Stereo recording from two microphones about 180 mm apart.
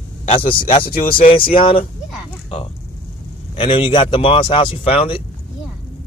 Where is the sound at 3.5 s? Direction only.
30° left (ahead or behind).